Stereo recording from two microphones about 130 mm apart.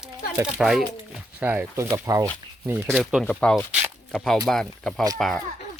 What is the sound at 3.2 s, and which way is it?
Speech, 5° left (ahead or behind).